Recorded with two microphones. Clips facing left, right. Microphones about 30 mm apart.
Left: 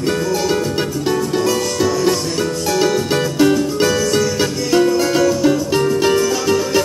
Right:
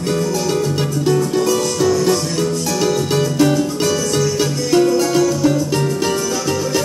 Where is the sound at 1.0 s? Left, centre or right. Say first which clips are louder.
Right 2 dB; centre.